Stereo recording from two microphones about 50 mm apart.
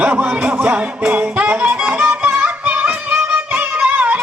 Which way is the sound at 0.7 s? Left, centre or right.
Right.